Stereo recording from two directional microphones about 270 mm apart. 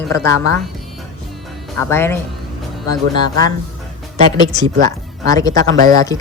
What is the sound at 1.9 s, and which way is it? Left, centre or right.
Speech, centre.